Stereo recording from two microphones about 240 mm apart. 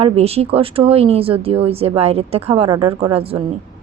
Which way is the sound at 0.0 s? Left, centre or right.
Right.